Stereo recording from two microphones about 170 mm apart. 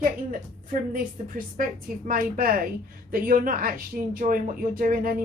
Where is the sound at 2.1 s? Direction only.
55° right (ahead or behind).